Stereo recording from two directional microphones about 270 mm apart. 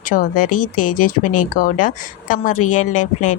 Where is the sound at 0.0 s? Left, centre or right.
Left.